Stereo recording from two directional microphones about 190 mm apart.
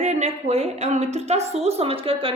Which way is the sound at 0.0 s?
35° right (ahead or behind).